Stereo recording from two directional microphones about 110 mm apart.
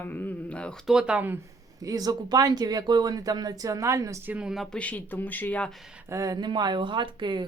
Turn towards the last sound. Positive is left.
turn(degrees=-45)  # may be behind; listen again after turning